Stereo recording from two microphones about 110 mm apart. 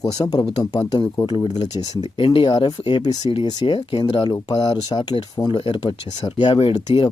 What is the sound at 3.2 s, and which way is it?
Speech, 55° left (ahead or behind).